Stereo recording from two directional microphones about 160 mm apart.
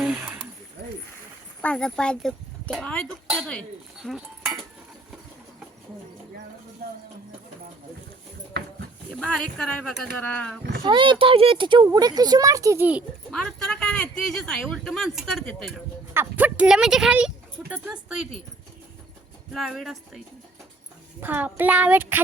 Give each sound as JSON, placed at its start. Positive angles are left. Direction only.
{"t": 0.0, "sound": "a sound", "side_deg": -5}
{"t": 1.6, "sound": "speech", "side_deg": 5}
{"t": 9.2, "sound": "speech", "side_deg": 5}
{"t": 10.8, "sound": "speech", "side_deg": -30}
{"t": 13.3, "sound": "speech", "side_deg": 5}
{"t": 16.1, "sound": "a child's voice", "side_deg": -10}
{"t": 19.5, "sound": "speech", "side_deg": 0}
{"t": 21.2, "sound": "a child's voice", "side_deg": -10}